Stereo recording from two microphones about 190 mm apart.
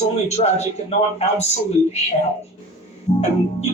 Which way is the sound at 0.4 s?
35° left (ahead or behind).